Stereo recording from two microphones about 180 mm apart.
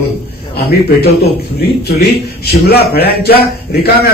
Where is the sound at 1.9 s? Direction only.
65° left (ahead or behind).